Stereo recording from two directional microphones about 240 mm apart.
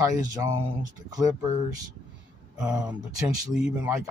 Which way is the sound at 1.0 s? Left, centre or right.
Centre.